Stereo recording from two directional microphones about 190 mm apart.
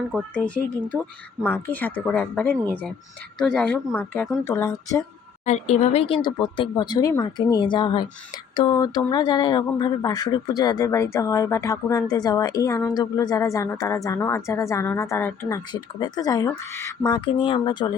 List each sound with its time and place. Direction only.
0.1 s speech: 5° left (ahead or behind)
5.5 s speech: 35° left (ahead or behind)